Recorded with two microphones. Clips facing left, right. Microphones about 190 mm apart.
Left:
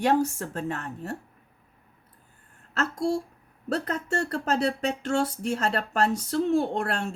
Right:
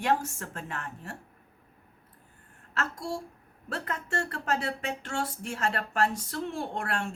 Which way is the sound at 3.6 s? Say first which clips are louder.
Left 7 dB; 40° left (ahead or behind).